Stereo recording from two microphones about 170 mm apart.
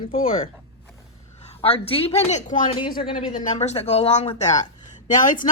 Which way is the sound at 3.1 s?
50° left (ahead or behind).